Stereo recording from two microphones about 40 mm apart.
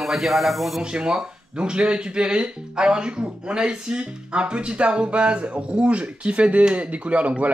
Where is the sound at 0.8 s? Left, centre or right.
Right.